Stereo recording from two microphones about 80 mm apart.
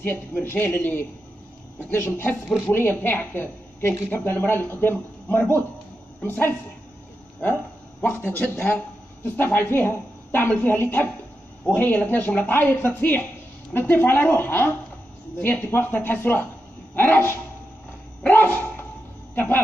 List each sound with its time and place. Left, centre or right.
0.0 s a woman's voice: left
8.0 s a woman's voice: left